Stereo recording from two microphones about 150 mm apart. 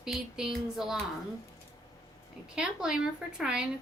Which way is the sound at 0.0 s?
5° right (ahead or behind).